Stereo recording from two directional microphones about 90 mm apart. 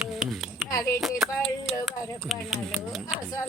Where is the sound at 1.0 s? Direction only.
Centre (ahead or behind).